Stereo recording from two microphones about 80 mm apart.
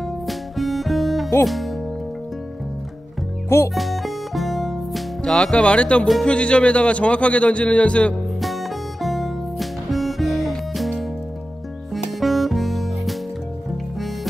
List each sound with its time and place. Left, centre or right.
0.0 s music: centre
1.4 s speech: centre
3.4 s music: left
3.7 s music: centre
5.2 s a man's voice: centre
8.4 s music: centre